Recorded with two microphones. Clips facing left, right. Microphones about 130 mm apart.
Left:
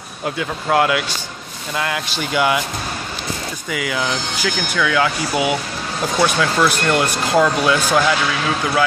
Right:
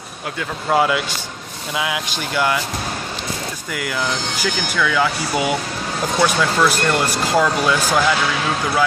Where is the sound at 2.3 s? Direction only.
5° left (ahead or behind).